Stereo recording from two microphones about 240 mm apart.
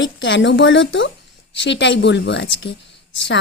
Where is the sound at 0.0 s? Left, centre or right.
Left.